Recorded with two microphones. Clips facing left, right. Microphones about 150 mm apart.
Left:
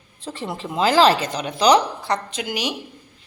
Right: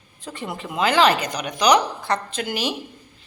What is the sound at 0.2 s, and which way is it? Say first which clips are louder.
Speech: left 2 dB; 30° left (ahead or behind).